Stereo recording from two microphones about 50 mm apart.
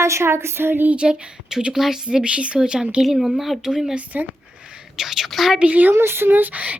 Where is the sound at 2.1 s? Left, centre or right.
Right.